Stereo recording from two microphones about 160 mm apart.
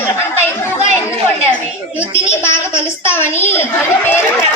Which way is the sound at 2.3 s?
15° left (ahead or behind).